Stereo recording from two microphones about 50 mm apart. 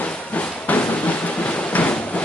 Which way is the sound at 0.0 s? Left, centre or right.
Left.